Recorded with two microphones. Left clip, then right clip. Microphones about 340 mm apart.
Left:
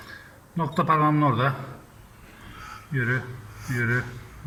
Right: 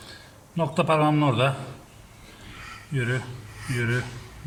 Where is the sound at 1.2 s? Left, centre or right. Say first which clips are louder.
Even; centre.